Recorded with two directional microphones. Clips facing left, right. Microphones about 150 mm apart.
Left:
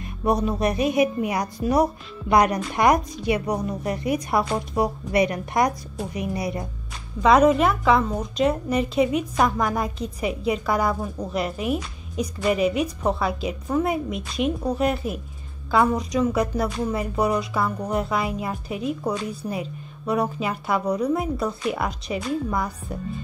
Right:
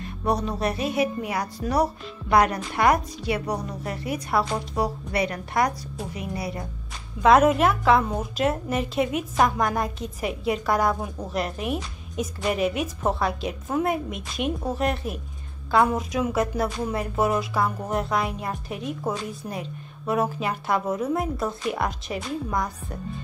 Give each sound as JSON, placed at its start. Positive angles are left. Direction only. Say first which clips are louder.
{"t": 0.2, "sound": "a woman's voice", "louder": "left 3 dB", "side_deg": 10}
{"t": 7.2, "sound": "a woman's voice", "louder": "left 1 dB", "side_deg": 0}